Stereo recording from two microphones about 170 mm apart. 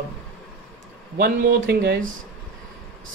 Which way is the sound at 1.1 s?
60° right (ahead or behind).